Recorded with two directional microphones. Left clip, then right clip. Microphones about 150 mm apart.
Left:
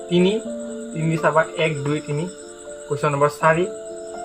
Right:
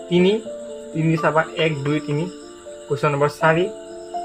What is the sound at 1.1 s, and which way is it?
Speech, 40° right (ahead or behind).